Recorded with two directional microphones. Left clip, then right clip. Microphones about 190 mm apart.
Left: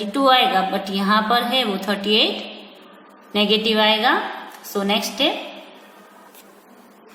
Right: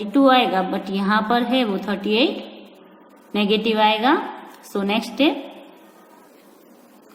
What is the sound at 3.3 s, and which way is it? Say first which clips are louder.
A woman's voice: left 2 dB; 35° right (ahead or behind).